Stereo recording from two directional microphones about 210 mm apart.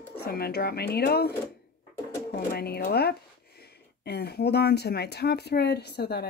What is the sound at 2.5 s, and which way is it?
Speech, 50° left (ahead or behind).